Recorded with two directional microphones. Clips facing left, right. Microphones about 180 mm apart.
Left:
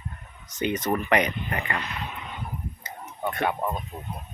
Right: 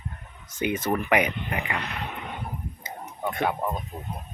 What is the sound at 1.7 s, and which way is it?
Speech, 60° right (ahead or behind).